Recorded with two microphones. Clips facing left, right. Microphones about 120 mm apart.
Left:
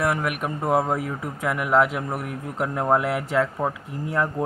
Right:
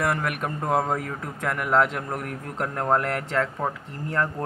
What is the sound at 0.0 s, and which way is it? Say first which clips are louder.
Speech: left 2 dB; 5° left (ahead or behind).